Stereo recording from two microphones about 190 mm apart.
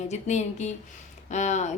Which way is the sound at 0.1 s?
35° left (ahead or behind).